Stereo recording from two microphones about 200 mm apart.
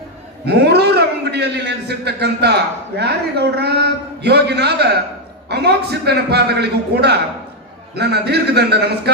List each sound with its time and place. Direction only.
0.4 s a man's voice: 55° right (ahead or behind)